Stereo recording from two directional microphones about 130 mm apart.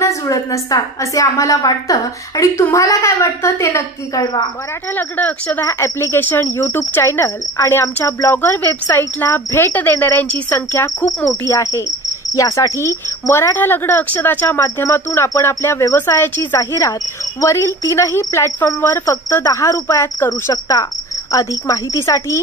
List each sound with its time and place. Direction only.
0.0 s speech: 25° left (ahead or behind)
4.9 s a woman's voice: 15° left (ahead or behind)